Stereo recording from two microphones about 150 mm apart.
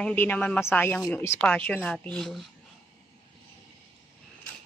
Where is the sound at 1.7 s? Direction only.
10° left (ahead or behind).